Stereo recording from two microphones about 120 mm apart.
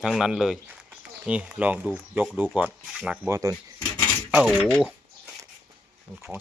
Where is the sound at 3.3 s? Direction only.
25° right (ahead or behind).